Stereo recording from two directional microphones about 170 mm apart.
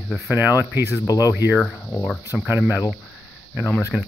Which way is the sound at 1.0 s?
20° left (ahead or behind).